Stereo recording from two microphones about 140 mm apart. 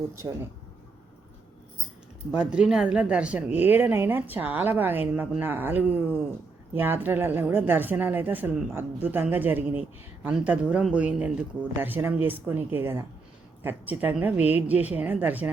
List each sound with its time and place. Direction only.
0.2 s speech: 20° right (ahead or behind)
2.3 s speech: 5° right (ahead or behind)